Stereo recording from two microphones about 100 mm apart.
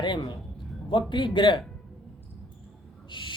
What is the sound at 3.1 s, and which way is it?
Speech, 55° left (ahead or behind).